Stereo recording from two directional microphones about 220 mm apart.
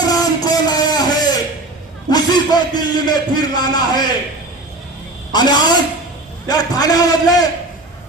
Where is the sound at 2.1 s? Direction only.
20° left (ahead or behind).